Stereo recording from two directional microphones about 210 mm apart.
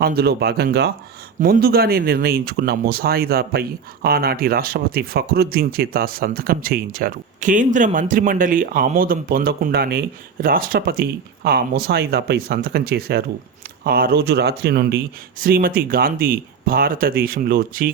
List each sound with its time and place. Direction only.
0.0 s speech: 50° right (ahead or behind)